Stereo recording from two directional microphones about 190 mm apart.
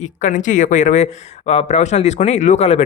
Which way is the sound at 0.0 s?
40° left (ahead or behind).